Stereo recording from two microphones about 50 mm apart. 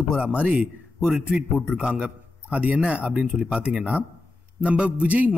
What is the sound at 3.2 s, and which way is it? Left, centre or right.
A man's voice, centre.